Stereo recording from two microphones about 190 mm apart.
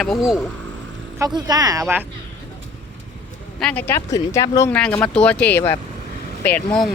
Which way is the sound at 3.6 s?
10° left (ahead or behind).